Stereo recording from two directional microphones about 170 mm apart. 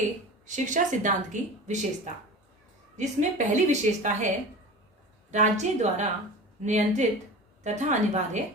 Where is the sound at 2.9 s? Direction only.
45° right (ahead or behind).